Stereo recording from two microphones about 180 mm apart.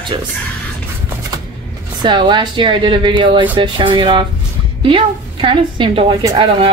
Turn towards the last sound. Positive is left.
turn(degrees=-20)  # may be behind; listen again after turning